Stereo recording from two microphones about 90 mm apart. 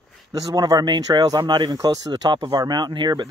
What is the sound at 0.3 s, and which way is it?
Speech, 45° right (ahead or behind).